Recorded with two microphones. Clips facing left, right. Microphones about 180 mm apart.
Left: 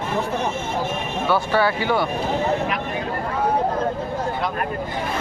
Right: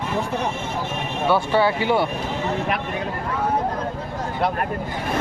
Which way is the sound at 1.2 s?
25° right (ahead or behind).